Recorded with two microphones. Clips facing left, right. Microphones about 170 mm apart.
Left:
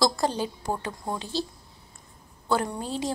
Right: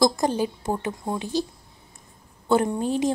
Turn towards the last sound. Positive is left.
turn(degrees=-15)  # may be behind; listen again after turning